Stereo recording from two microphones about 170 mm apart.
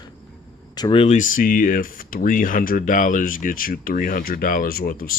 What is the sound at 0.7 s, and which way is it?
Speech, 25° left (ahead or behind).